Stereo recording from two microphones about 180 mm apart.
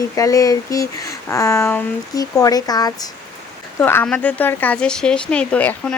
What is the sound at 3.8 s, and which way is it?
Speech, 10° left (ahead or behind).